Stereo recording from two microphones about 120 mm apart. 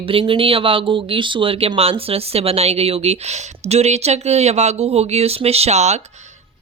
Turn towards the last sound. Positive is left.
turn(degrees=-70)  # may be behind; listen again after turning